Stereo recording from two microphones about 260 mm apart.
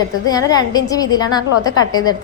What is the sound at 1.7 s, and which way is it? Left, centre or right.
Speech, left.